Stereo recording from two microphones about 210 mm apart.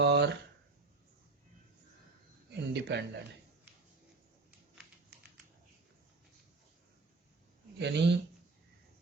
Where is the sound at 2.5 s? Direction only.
55° right (ahead or behind).